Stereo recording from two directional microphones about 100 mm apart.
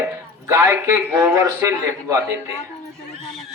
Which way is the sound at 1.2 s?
35° right (ahead or behind).